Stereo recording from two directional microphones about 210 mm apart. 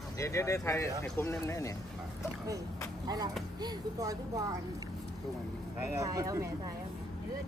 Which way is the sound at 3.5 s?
20° right (ahead or behind).